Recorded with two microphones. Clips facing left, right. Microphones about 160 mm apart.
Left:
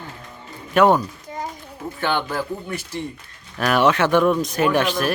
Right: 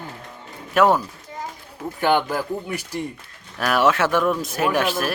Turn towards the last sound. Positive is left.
turn(degrees=-5)  # may be behind; listen again after turning